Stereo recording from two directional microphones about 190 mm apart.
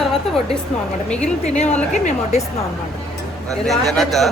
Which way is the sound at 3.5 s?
Centre (ahead or behind).